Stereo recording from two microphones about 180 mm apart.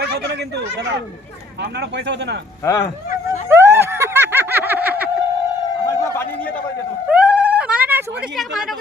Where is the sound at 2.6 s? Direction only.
15° left (ahead or behind).